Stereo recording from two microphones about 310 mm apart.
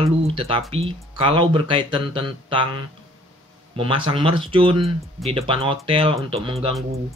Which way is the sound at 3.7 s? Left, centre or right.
Centre.